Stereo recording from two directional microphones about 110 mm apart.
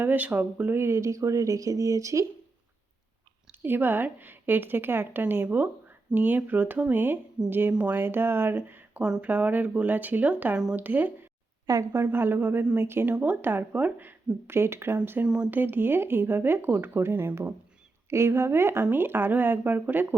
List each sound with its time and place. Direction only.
0.0 s speech: 15° right (ahead or behind)
3.6 s a woman's voice: 20° right (ahead or behind)
11.6 s a woman's voice: 30° right (ahead or behind)
12.1 s a woman's voice: 20° right (ahead or behind)